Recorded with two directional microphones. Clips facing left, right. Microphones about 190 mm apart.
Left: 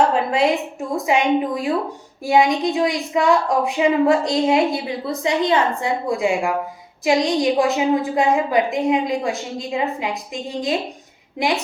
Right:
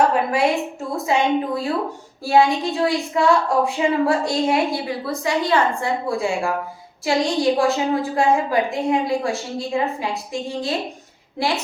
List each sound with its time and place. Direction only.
0.1 s a woman's voice: 20° left (ahead or behind)